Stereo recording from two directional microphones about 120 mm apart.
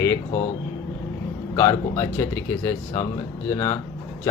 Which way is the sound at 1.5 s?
25° left (ahead or behind).